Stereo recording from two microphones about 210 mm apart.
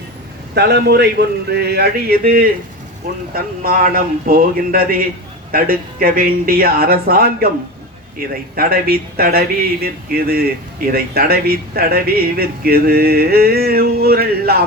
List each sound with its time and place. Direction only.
0.5 s speech: 50° right (ahead or behind)